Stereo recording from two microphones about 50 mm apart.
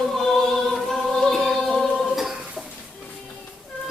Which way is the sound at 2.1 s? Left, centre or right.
Centre.